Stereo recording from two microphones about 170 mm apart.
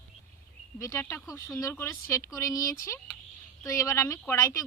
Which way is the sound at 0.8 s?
15° left (ahead or behind).